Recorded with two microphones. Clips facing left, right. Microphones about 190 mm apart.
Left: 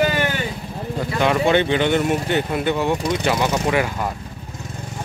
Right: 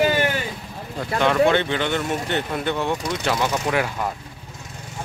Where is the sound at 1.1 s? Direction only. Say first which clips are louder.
Even; 10° left (ahead or behind).